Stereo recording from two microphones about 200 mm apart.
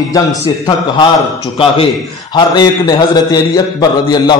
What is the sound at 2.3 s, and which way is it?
A man's voice, 20° left (ahead or behind).